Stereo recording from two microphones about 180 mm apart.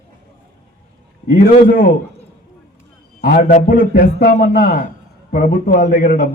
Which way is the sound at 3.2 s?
55° left (ahead or behind).